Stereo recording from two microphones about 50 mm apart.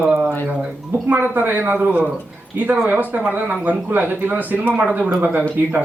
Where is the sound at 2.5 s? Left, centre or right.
Right.